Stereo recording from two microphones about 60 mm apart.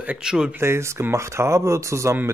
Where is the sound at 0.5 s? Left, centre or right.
Right.